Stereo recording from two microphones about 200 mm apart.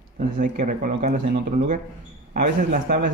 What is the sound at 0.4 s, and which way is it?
Speech, 40° right (ahead or behind).